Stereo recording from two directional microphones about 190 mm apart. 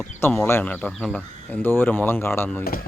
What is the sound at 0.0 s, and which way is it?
Speech, 10° left (ahead or behind).